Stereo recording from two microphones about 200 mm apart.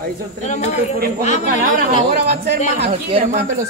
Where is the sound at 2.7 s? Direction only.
45° right (ahead or behind).